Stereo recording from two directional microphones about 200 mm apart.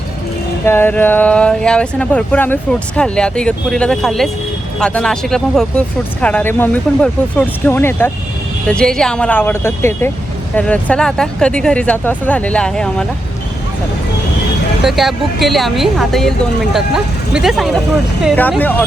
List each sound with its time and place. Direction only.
0.6 s speech: 10° left (ahead or behind)
14.8 s speech: centre (ahead or behind)